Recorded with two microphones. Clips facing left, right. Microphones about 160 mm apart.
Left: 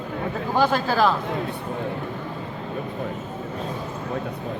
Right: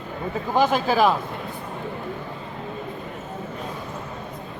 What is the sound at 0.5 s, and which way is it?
Speech, 15° right (ahead or behind).